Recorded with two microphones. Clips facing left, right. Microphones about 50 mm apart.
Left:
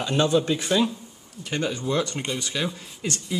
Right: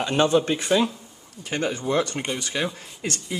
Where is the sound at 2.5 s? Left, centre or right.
Right.